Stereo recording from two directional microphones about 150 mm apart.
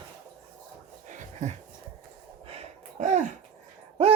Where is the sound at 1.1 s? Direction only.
55° right (ahead or behind).